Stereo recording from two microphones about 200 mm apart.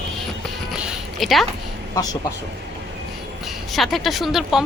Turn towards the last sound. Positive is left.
turn(degrees=0)  # may be behind; listen again after turning